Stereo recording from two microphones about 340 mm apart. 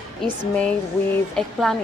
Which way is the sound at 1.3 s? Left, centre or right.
Centre.